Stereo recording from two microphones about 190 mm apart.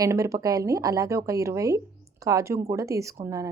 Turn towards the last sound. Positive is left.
turn(degrees=-15)  # may be behind; listen again after turning